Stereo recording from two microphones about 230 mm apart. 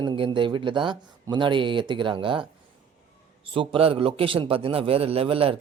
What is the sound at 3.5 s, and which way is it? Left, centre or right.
Speech, right.